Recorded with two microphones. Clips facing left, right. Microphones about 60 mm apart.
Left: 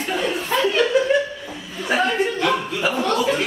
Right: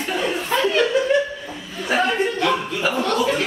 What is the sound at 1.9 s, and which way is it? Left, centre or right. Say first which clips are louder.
Chuckle: even; centre.